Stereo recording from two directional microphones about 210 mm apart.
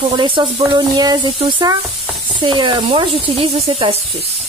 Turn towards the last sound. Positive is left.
turn(degrees=-25)  # may be behind; listen again after turning